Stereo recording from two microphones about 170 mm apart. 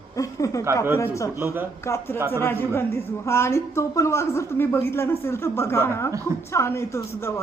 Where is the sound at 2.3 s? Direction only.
15° left (ahead or behind).